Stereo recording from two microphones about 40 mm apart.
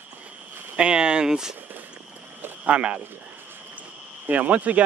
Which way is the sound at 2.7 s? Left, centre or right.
Right.